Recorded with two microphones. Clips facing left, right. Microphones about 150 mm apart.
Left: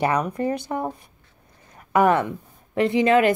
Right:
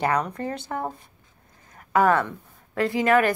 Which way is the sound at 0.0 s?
20° left (ahead or behind).